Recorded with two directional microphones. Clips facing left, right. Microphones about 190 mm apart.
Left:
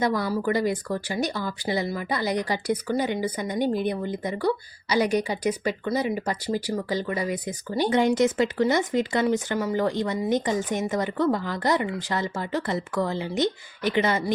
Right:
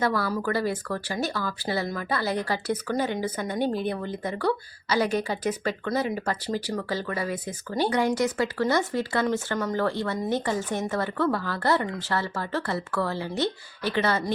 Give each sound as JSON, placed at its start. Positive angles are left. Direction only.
{"t": 0.0, "sound": "speech", "side_deg": 15}